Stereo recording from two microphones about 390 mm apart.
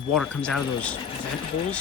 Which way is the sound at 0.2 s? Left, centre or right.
Centre.